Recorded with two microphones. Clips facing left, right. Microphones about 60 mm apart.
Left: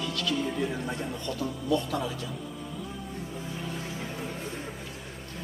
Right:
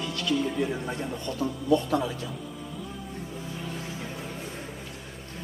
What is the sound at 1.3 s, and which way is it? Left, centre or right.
Speech, right.